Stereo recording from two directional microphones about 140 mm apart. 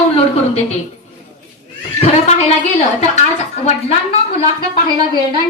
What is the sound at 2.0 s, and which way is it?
Speech, 55° left (ahead or behind).